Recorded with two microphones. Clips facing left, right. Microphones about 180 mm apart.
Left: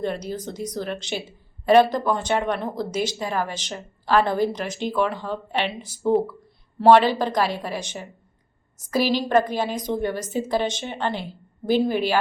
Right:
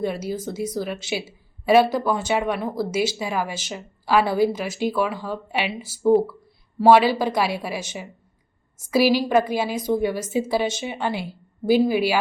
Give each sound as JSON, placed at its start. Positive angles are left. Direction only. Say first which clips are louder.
{"t": 0.0, "sound": "a woman's voice", "louder": "right 2 dB", "side_deg": -10}